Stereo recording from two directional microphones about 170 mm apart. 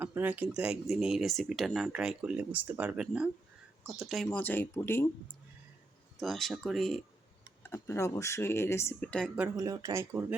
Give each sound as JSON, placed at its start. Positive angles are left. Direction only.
{"t": 0.0, "sound": "speech", "side_deg": -10}
{"t": 6.1, "sound": "speech", "side_deg": 0}
{"t": 7.6, "sound": "speech", "side_deg": 15}
{"t": 9.6, "sound": "speech", "side_deg": -20}